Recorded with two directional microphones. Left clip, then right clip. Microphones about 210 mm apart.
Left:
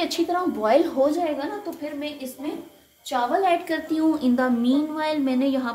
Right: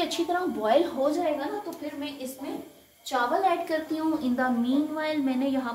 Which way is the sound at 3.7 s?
50° left (ahead or behind).